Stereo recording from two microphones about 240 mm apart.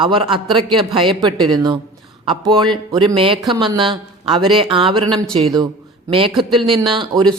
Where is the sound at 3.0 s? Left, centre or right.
Centre.